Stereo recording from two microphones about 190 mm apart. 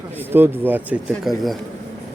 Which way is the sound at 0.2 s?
10° right (ahead or behind).